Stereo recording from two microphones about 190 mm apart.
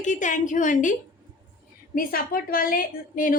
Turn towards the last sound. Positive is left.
turn(degrees=45)  # may be behind; listen again after turning